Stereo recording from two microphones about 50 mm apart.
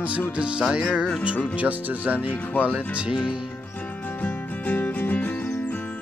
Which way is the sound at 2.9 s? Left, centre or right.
Right.